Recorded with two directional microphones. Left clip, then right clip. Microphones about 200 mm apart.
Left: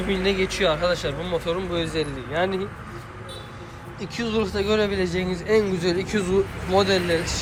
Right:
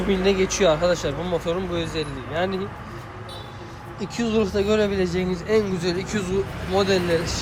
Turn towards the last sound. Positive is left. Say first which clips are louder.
# left 1 dB
turn(degrees=-15)  # may be behind; listen again after turning